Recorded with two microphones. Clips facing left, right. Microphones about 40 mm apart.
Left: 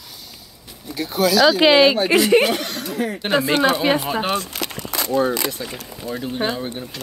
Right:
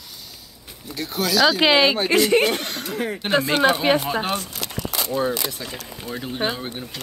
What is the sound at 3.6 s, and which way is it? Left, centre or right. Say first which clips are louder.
Speech: even; centre.